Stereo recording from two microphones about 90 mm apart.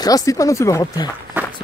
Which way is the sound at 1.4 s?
20° right (ahead or behind).